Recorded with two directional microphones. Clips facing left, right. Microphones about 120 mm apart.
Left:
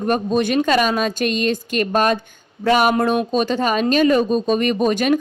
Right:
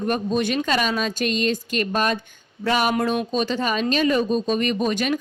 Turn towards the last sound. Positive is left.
turn(degrees=45)  # may be behind; listen again after turning